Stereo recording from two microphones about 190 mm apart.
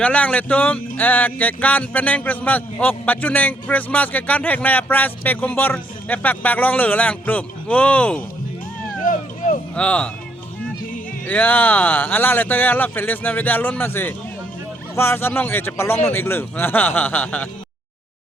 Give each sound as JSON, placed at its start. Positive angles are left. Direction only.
{"t": 0.0, "sound": "speech", "side_deg": 5}
{"t": 9.0, "sound": "a sound", "side_deg": 45}
{"t": 9.7, "sound": "speech", "side_deg": 5}
{"t": 11.3, "sound": "speech", "side_deg": 10}